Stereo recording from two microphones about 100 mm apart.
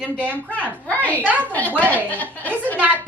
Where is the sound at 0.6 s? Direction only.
15° left (ahead or behind).